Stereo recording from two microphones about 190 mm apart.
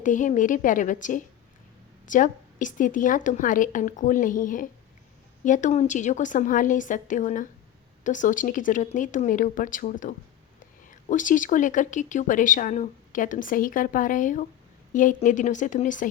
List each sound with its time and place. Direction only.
0.0 s a woman's voice: 40° left (ahead or behind)